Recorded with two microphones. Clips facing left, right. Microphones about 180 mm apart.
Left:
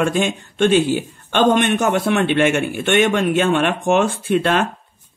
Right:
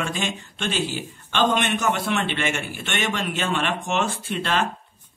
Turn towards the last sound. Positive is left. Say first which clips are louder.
# left 8 dB
turn(degrees=55)  # may be behind; listen again after turning